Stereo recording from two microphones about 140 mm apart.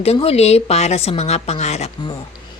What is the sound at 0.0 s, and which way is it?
Speech, 45° left (ahead or behind).